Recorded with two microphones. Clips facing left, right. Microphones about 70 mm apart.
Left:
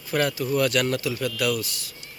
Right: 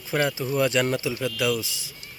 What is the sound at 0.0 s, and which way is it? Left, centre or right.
Speech, centre.